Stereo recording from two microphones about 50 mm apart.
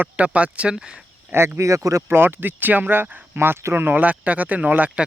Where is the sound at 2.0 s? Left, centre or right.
Right.